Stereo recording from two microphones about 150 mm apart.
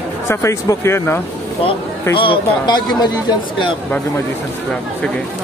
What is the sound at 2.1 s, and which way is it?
Speech, 35° left (ahead or behind).